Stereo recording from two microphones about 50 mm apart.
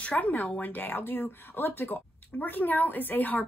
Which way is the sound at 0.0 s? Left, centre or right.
Left.